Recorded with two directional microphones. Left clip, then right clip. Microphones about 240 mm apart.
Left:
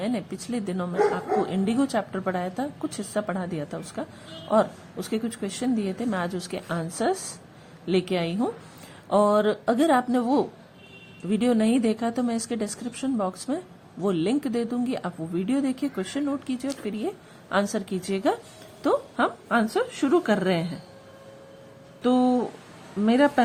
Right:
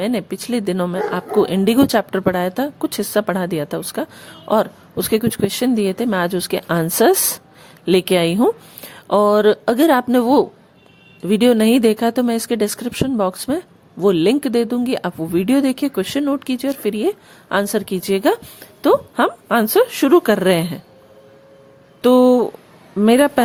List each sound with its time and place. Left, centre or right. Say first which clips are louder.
0.0 s speech: right 9 dB; right
22.0 s speech: right 11 dB; right